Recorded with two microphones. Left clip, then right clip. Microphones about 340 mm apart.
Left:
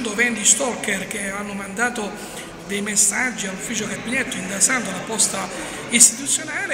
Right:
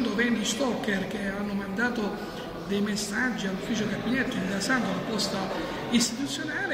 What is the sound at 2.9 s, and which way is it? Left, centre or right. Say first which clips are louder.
Speech: left 12 dB; centre.